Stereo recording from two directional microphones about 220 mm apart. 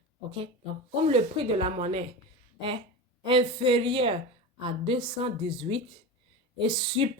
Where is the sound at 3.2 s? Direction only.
25° right (ahead or behind).